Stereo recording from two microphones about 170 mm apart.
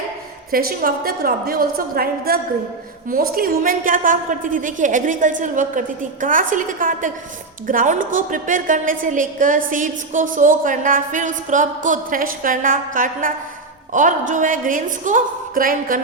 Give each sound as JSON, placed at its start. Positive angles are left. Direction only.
{"t": 0.5, "sound": "a woman's voice", "side_deg": -60}